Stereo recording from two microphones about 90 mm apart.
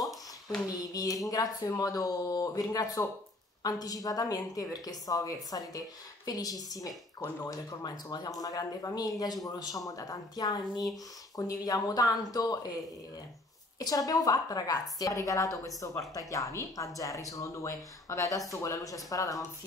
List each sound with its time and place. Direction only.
0.0 s a sound: centre (ahead or behind)
0.7 s speech: 40° left (ahead or behind)
13.7 s speech: 45° left (ahead or behind)